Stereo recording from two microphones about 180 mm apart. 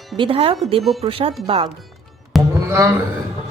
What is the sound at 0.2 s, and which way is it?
Speech, 30° right (ahead or behind).